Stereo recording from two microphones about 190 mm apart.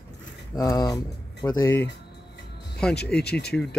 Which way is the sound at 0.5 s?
20° left (ahead or behind).